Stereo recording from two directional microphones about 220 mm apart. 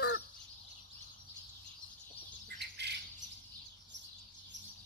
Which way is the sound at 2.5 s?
50° right (ahead or behind).